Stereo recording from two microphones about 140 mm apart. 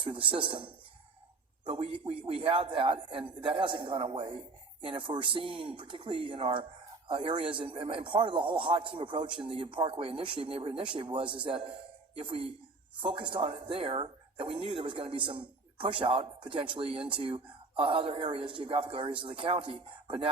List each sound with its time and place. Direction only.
0.0 s speech: 35° right (ahead or behind)